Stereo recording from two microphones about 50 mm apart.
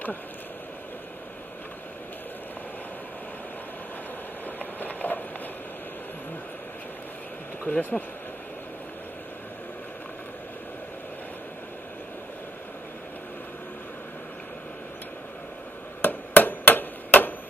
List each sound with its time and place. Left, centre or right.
4.7 s a sound: left
7.6 s speech: left
16.0 s hammer: left